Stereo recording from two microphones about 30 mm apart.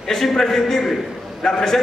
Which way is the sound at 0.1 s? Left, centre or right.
Centre.